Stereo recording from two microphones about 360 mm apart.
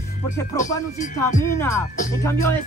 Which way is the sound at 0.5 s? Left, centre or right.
Centre.